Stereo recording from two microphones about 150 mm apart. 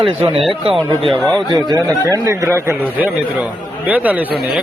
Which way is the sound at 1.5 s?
25° right (ahead or behind).